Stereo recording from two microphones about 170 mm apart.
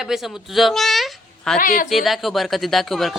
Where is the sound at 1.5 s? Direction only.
55° left (ahead or behind).